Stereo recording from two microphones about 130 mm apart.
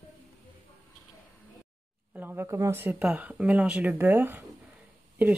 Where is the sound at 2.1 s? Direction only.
15° right (ahead or behind).